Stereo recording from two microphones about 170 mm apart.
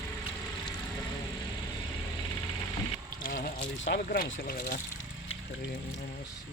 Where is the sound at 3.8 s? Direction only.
90° left; by 4.8 s 60° left (ahead or behind).